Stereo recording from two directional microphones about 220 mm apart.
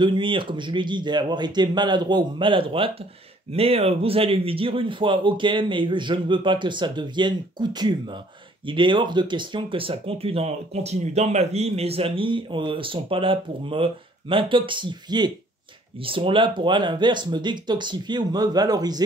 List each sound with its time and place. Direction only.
0.0 s speech: 20° right (ahead or behind)